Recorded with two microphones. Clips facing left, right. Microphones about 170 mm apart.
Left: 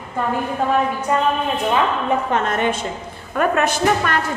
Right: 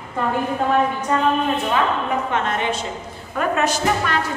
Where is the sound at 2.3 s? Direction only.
45° left (ahead or behind).